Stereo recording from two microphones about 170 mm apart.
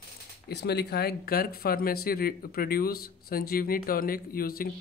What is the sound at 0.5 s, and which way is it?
Speech, 75° left (ahead or behind).